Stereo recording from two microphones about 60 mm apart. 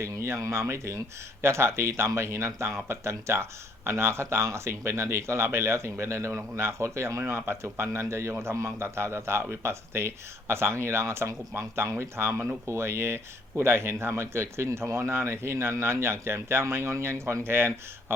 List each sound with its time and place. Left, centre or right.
0.0 s a sound: right
0.4 s a man's voice: right
7.3 s a man's voice: right